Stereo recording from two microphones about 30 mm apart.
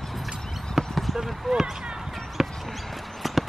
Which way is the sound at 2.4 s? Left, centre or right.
Centre.